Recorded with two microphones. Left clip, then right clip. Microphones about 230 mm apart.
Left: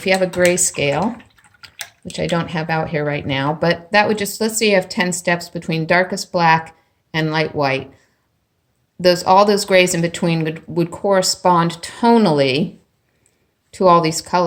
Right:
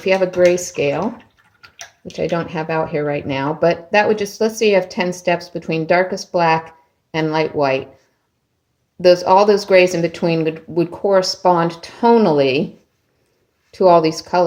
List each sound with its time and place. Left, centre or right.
0.0 s speech: left
2.0 s speech: left
9.0 s speech: centre
13.7 s speech: left